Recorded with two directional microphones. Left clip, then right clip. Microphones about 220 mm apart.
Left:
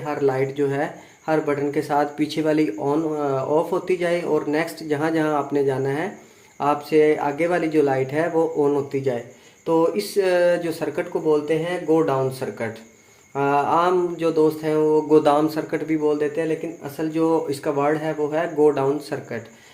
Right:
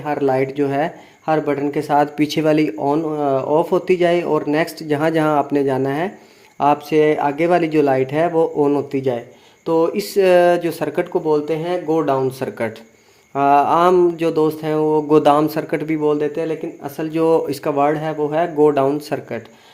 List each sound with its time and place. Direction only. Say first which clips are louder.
0.0 s speech: right 4 dB; 45° right (ahead or behind)